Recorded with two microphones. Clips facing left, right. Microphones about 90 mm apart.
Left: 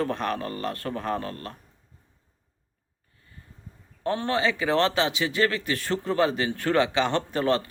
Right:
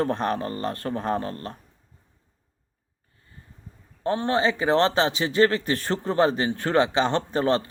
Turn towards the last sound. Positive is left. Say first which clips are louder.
# right 2 dB
turn(degrees=-30)  # may be behind; listen again after turning